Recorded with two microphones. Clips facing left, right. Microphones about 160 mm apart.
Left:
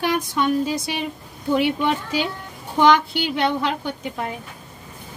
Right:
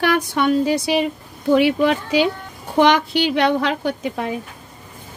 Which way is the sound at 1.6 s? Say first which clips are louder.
Right 4 dB; 90° right.